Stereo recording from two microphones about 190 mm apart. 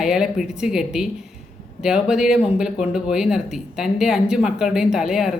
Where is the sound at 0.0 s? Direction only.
5° right (ahead or behind).